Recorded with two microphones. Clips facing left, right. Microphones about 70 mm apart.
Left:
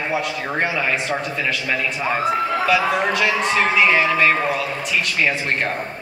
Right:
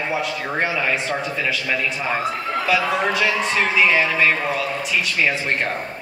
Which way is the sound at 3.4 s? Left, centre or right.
Centre.